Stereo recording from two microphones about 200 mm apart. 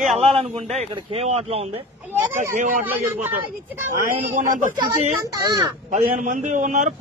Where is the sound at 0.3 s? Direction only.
30° right (ahead or behind).